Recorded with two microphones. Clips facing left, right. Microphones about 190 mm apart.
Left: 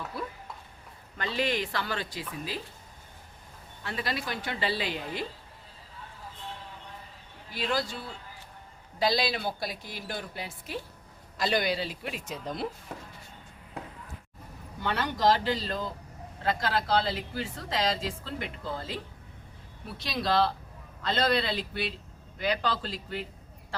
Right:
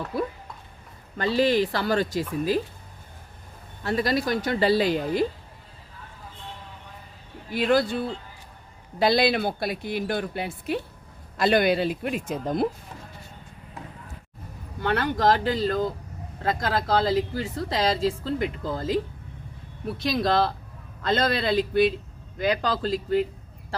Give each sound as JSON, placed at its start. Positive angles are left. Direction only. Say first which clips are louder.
{"t": 1.1, "sound": "speech", "louder": "right 9 dB", "side_deg": -35}
{"t": 3.8, "sound": "speech", "louder": "right 10 dB", "side_deg": -40}
{"t": 7.5, "sound": "speech", "louder": "right 9 dB", "side_deg": -55}
{"t": 14.8, "sound": "speech", "louder": "right 5 dB", "side_deg": -55}
{"t": 20.0, "sound": "a man's voice", "louder": "right 4 dB", "side_deg": -45}